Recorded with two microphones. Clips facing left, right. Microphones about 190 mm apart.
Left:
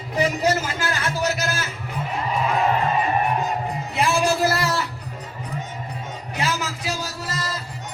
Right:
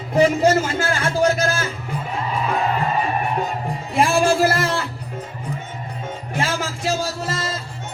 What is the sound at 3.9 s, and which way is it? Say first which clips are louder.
Music: right 4 dB; 50° right (ahead or behind).